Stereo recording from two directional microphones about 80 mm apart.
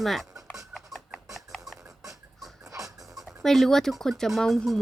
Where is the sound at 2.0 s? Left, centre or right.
Right.